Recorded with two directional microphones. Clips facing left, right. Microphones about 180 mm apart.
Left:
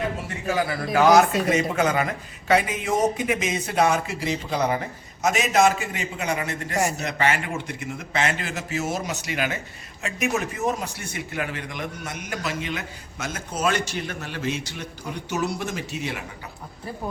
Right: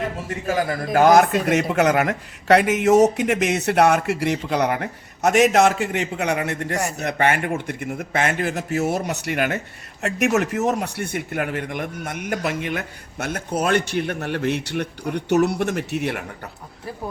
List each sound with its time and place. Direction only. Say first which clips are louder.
0.4 s a man's voice: right 2 dB; 45° right (ahead or behind)
1.5 s a man's voice: right 3 dB; 70° right (ahead or behind)
10.0 s speech: right 6 dB; 75° right (ahead or behind)